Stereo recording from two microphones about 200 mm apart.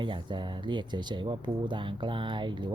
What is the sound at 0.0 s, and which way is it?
Speech, 25° right (ahead or behind).